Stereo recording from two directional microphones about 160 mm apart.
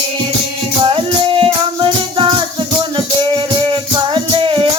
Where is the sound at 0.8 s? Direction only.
35° right (ahead or behind).